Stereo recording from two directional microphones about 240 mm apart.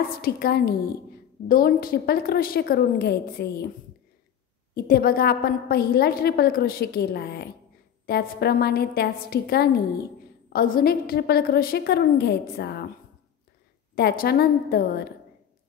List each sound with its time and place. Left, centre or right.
0.0 s a woman's voice: left
4.7 s a woman's voice: left
13.9 s a woman's voice: left